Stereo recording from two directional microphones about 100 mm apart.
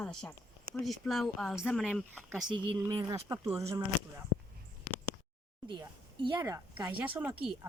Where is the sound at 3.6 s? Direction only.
30° right (ahead or behind).